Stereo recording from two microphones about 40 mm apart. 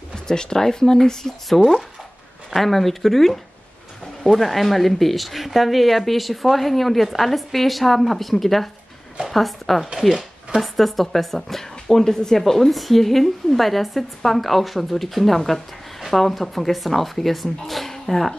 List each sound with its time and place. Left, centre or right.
0.1 s a woman's voice: centre